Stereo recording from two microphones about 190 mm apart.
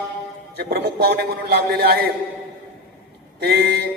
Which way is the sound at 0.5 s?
55° right (ahead or behind).